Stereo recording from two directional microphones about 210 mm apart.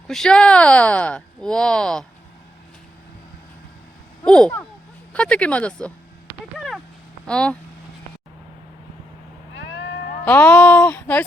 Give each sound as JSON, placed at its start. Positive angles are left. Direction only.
{"t": 0.1, "sound": "speech", "side_deg": 5}
{"t": 4.3, "sound": "speech", "side_deg": 5}
{"t": 6.6, "sound": "a sound", "side_deg": 0}
{"t": 7.3, "sound": "speech", "side_deg": 5}
{"t": 9.7, "sound": "cat", "side_deg": 60}
{"t": 10.2, "sound": "speech", "side_deg": 5}